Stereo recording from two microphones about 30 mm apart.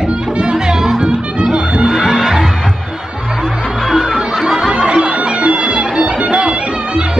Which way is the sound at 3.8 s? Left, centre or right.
Centre.